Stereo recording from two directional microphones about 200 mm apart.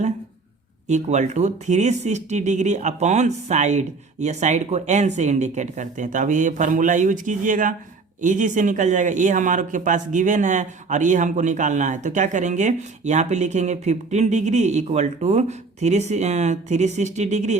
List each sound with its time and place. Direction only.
0.9 s speech: 35° right (ahead or behind)